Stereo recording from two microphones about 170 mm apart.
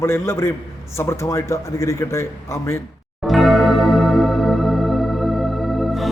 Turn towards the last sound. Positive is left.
turn(degrees=0)  # may be behind; listen again after turning